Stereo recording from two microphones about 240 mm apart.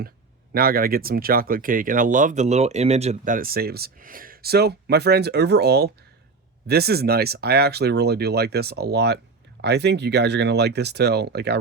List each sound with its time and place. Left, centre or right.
0.5 s speech: right